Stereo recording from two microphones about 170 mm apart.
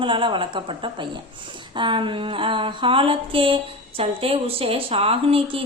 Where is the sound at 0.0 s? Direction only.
30° right (ahead or behind).